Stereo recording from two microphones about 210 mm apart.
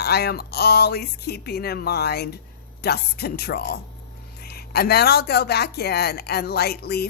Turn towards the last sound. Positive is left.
turn(degrees=50)  # may be behind; listen again after turning